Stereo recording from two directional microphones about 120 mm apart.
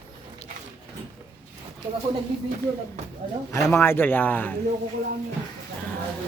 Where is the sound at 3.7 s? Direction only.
20° left (ahead or behind).